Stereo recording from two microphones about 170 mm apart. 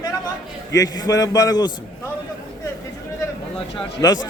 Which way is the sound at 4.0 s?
20° left (ahead or behind).